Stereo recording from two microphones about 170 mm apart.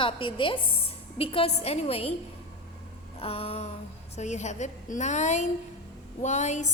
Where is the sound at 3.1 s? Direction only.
35° left (ahead or behind).